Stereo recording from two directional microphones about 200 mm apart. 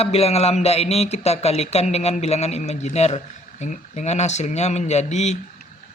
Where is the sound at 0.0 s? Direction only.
30° left (ahead or behind).